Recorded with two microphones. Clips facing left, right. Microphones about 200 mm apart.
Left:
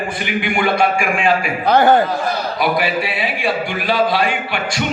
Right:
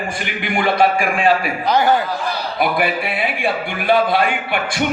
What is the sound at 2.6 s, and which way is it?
A man's voice, 55° right (ahead or behind).